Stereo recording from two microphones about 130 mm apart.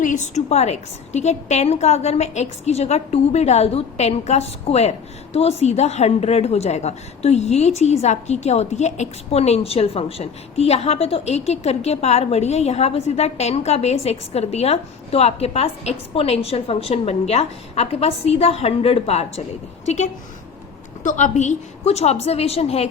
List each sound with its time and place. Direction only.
0.0 s a woman's voice: 70° left (ahead or behind)
21.0 s a woman's voice: 75° left (ahead or behind); by 22.9 s 50° left (ahead or behind)